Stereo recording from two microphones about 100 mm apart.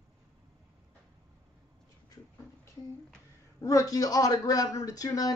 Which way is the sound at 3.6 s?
35° left (ahead or behind).